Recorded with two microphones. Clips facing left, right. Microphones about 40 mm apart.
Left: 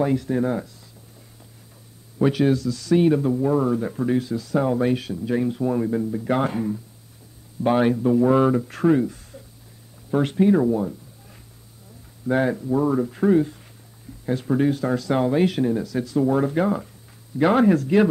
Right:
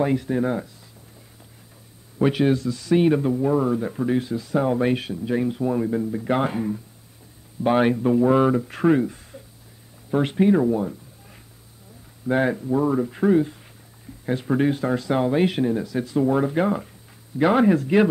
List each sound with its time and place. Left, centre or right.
0.0 s speech: right
2.1 s a man's voice: centre
4.2 s a man's voice: right
5.1 s a man's voice: centre
8.2 s a man's voice: centre
10.7 s cat: centre
12.3 s speech: centre
14.2 s a man's voice: right
17.4 s speech: centre
17.7 s a man's voice: centre